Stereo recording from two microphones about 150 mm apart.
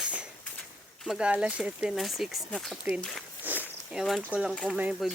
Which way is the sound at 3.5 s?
10° right (ahead or behind).